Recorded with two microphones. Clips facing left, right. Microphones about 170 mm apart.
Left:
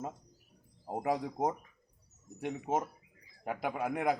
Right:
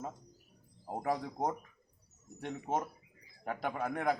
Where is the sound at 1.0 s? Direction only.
15° left (ahead or behind).